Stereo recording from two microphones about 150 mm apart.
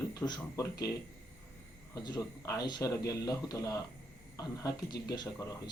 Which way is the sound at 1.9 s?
25° left (ahead or behind).